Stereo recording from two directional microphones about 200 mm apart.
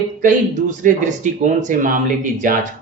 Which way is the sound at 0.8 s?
40° right (ahead or behind).